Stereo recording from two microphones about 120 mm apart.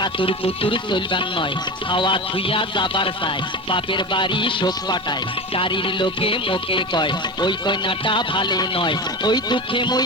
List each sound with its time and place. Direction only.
0.0 s music: 45° left (ahead or behind)